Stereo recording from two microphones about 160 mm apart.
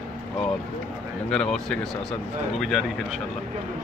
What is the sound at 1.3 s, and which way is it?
Speech, 5° left (ahead or behind).